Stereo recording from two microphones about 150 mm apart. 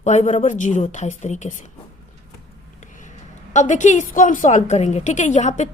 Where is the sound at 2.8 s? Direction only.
55° left (ahead or behind).